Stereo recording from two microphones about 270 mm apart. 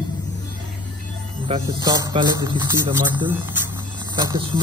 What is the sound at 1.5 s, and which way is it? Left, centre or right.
Speech, centre.